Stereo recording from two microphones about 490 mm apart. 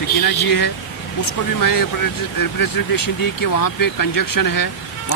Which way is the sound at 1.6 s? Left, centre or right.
Left.